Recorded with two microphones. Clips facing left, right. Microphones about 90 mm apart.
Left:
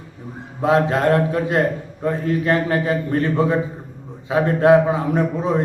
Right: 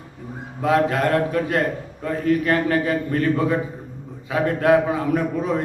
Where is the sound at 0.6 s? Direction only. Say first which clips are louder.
Left 2 dB; 25° left (ahead or behind).